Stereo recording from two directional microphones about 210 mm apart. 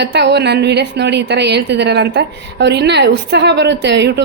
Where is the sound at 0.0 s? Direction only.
55° right (ahead or behind).